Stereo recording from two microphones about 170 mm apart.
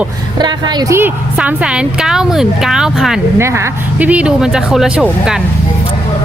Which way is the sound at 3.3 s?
15° right (ahead or behind).